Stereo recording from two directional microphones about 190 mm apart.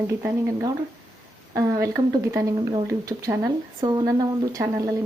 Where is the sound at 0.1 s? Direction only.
10° right (ahead or behind).